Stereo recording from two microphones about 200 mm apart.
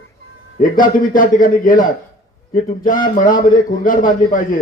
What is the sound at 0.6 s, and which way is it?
A man's voice, 45° left (ahead or behind).